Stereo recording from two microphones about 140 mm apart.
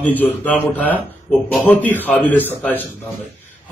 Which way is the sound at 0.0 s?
10° left (ahead or behind).